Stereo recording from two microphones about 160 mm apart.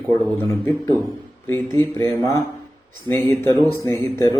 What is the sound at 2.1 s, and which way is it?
A man's voice, 15° left (ahead or behind).